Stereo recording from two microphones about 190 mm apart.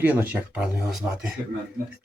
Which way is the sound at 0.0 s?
10° right (ahead or behind).